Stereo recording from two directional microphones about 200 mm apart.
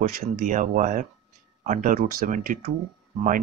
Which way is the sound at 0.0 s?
45° right (ahead or behind).